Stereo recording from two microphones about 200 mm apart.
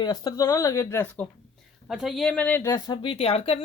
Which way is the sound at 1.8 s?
Centre (ahead or behind).